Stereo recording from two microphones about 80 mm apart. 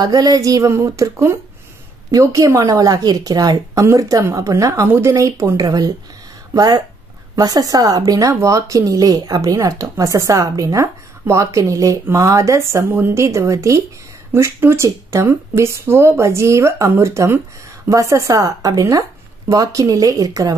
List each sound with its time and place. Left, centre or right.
0.0 s speech: right
3.8 s speech: right
4.8 s speech: right
12.9 s speech: right
13.2 s speech: right